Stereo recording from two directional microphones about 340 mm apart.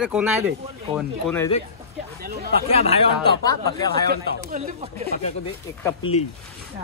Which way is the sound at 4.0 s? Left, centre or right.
Right.